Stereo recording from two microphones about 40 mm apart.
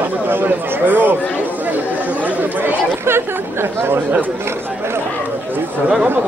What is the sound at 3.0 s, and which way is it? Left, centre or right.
Speech, right.